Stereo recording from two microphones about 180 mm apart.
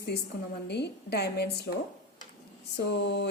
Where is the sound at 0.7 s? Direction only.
65° left (ahead or behind).